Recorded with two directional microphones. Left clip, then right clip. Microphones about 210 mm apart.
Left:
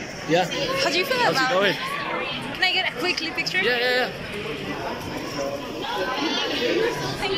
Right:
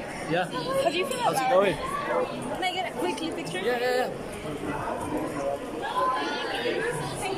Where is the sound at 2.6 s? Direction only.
15° right (ahead or behind).